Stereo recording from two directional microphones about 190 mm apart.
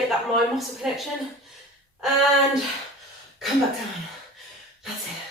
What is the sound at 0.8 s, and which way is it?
Speech, centre (ahead or behind).